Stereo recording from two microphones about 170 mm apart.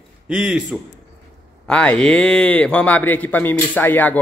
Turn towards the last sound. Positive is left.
turn(degrees=10)  # may be behind; listen again after turning